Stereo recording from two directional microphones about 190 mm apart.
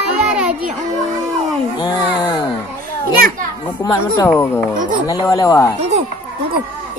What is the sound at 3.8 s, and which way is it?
Speech, 15° left (ahead or behind).